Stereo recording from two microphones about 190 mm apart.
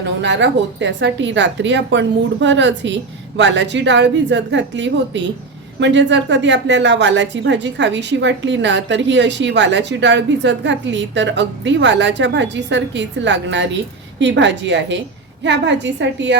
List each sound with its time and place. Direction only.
0.2 s a woman's voice: 70° right (ahead or behind)